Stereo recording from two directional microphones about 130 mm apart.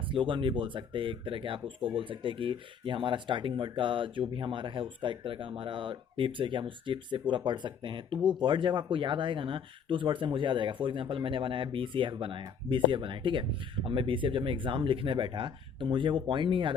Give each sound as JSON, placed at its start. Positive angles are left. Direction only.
{"t": 0.1, "sound": "speech", "side_deg": -40}